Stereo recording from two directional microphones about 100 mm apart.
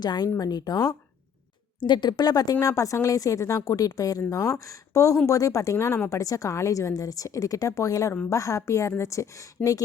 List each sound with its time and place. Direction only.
0.0 s a woman's voice: 45° left (ahead or behind)